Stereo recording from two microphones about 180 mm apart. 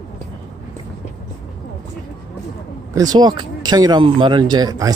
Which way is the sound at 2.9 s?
20° right (ahead or behind).